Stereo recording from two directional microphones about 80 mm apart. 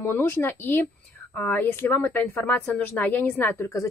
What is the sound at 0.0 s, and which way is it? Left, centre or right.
A woman's voice, left.